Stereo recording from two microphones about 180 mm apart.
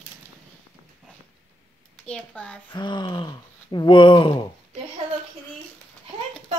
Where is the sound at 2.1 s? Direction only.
5° left (ahead or behind).